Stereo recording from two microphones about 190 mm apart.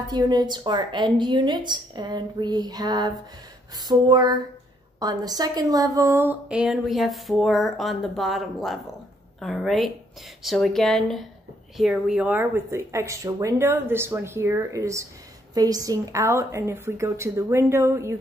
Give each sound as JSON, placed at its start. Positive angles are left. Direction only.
{"t": 0.0, "sound": "a woman's voice", "side_deg": -20}